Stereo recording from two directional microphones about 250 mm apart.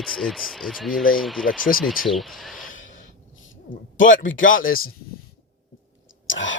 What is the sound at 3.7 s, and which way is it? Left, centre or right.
Speech, left.